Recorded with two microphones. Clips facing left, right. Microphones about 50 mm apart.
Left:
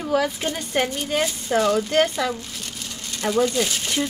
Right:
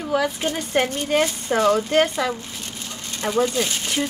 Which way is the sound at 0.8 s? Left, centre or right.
Right.